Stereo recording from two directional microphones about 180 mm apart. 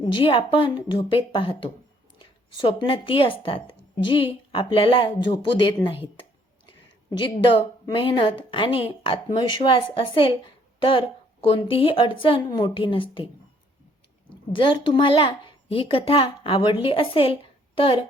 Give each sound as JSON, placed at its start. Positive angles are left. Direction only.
{"t": 0.0, "sound": "a woman's voice", "side_deg": 25}
{"t": 7.1, "sound": "a woman's voice", "side_deg": 25}
{"t": 14.5, "sound": "a woman's voice", "side_deg": 30}